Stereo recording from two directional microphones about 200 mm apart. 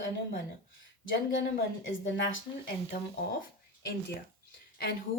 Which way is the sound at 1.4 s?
60° left (ahead or behind).